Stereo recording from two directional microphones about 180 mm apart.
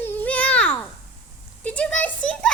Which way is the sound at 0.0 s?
10° left (ahead or behind).